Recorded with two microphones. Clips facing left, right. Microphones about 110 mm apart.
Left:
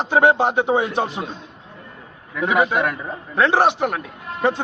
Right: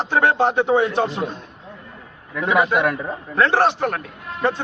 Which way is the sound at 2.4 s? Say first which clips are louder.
Even; 5° left (ahead or behind).